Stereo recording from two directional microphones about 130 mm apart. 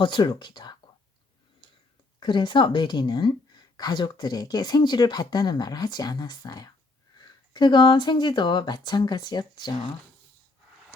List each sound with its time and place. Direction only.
0.0 s speech: 35° left (ahead or behind)
2.2 s a woman's voice: 40° left (ahead or behind)